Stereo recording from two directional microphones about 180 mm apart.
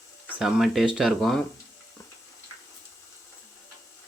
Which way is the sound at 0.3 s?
Centre (ahead or behind).